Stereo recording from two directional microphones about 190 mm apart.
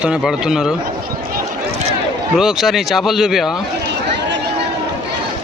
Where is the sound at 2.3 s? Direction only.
Centre (ahead or behind).